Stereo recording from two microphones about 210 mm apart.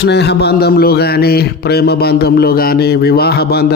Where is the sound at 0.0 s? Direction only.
55° left (ahead or behind).